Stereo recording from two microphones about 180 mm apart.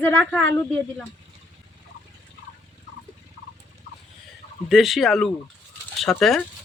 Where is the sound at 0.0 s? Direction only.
10° left (ahead or behind).